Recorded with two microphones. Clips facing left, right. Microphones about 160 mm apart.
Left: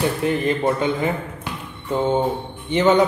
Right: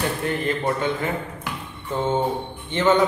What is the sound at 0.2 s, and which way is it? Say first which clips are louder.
Speech: left 6 dB; 20° left (ahead or behind).